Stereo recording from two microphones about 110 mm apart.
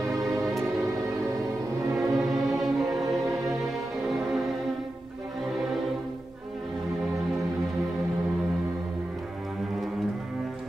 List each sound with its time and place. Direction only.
0.1 s music: 30° right (ahead or behind)
2.0 s music: centre (ahead or behind)